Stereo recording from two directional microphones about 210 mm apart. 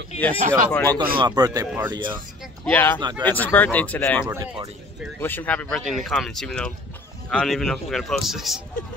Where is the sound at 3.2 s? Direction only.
10° left (ahead or behind).